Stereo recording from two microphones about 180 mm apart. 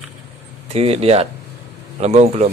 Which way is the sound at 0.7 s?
35° right (ahead or behind).